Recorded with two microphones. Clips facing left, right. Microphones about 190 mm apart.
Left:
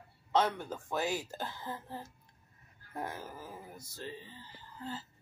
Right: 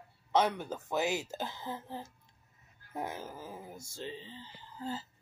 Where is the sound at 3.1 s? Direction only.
20° right (ahead or behind).